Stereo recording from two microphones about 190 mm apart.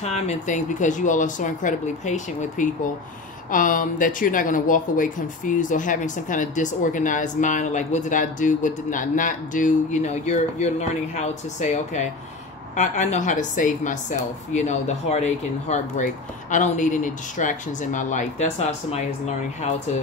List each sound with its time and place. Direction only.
0.0 s speech: 35° left (ahead or behind)